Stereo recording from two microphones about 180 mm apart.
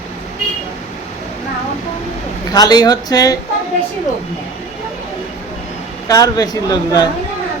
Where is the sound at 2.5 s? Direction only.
20° left (ahead or behind).